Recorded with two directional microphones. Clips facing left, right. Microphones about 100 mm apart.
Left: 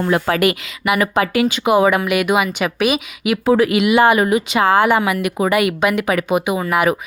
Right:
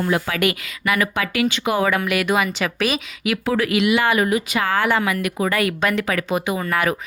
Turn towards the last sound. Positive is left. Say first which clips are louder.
# left 4 dB
turn(degrees=15)  # may be behind; listen again after turning